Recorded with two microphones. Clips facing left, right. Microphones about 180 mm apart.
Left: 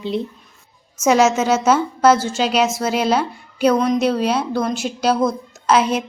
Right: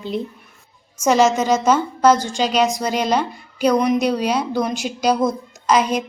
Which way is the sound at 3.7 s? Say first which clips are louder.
Even; 15° right (ahead or behind).